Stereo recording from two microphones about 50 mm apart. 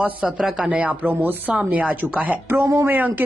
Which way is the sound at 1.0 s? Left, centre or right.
Right.